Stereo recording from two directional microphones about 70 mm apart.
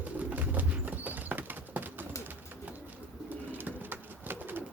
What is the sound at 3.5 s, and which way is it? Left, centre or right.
Bird, right.